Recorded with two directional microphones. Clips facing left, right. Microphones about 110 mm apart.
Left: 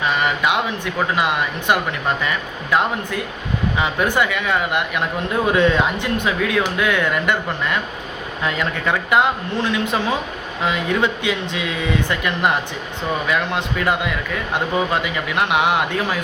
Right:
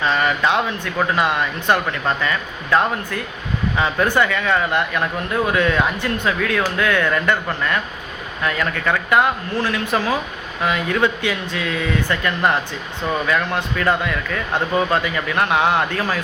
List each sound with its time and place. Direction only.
0.0 s a sound: 15° left (ahead or behind)
1.1 s speech: 15° left (ahead or behind)
3.8 s speech: 15° left (ahead or behind)